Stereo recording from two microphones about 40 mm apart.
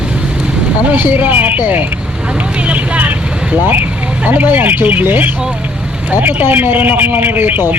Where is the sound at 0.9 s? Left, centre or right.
Right.